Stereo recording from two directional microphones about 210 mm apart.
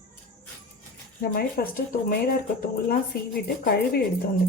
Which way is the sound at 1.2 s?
45° left (ahead or behind).